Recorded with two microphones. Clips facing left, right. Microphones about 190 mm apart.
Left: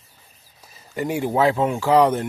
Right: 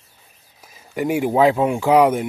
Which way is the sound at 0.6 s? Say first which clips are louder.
Right 3 dB; 10° right (ahead or behind).